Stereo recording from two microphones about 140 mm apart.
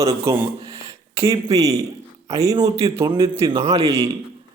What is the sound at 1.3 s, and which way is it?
A man's voice, 25° right (ahead or behind).